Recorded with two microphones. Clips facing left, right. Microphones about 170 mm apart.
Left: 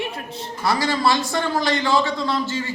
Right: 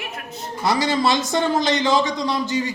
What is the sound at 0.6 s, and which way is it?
A man's voice, 20° right (ahead or behind).